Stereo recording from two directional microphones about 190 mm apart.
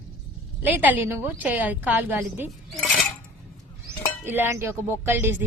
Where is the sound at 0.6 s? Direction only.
10° right (ahead or behind).